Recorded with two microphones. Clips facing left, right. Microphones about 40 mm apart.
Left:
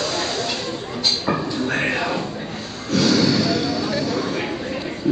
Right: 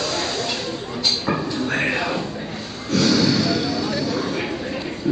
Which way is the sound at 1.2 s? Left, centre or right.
Centre.